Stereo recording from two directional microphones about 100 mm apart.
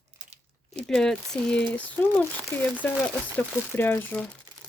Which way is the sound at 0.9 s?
5° left (ahead or behind).